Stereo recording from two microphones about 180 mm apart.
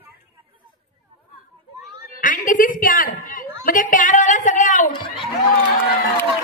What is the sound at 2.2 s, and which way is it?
A woman's voice, 45° left (ahead or behind).